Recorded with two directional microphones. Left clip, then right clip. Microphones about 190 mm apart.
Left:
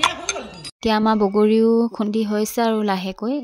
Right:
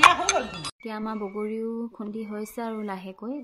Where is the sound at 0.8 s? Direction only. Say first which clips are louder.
Left 17 dB; 55° left (ahead or behind).